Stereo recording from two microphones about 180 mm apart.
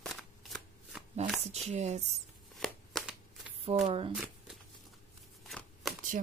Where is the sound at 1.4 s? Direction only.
35° right (ahead or behind).